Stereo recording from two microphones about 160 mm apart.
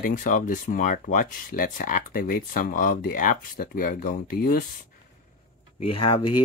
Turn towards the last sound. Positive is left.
turn(degrees=30)  # may be behind; listen again after turning